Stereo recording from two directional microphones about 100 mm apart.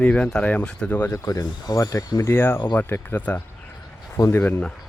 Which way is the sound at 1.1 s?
35° left (ahead or behind).